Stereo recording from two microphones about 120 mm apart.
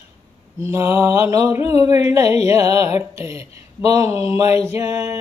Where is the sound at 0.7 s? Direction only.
20° right (ahead or behind).